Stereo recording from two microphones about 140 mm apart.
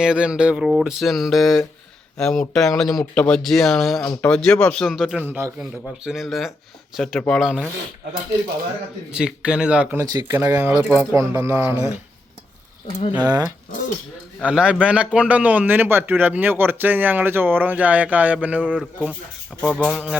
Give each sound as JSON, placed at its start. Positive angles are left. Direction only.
{"t": 0.0, "sound": "speech", "side_deg": -5}
{"t": 5.2, "sound": "a man's voice", "side_deg": -15}
{"t": 6.1, "sound": "speech", "side_deg": 0}
{"t": 9.1, "sound": "a man's voice", "side_deg": -5}
{"t": 10.0, "sound": "speech", "side_deg": -25}
{"t": 10.3, "sound": "a man's voice", "side_deg": -15}
{"t": 13.1, "sound": "speech", "side_deg": -30}
{"t": 14.4, "sound": "a man's voice", "side_deg": -10}
{"t": 19.6, "sound": "speech", "side_deg": 0}